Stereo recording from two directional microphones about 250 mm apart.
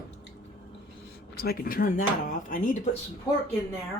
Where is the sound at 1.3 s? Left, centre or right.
Left.